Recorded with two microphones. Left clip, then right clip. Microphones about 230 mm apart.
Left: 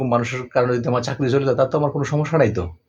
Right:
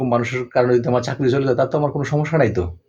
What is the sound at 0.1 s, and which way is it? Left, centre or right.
Speech, centre.